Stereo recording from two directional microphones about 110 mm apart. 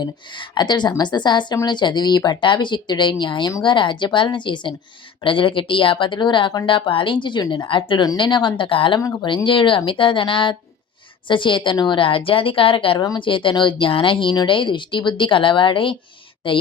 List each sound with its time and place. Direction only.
0.0 s a woman's voice: 40° left (ahead or behind)
13.0 s speech: 45° left (ahead or behind)